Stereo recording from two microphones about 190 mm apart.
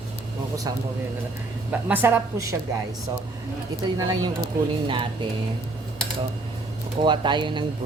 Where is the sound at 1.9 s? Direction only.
10° right (ahead or behind).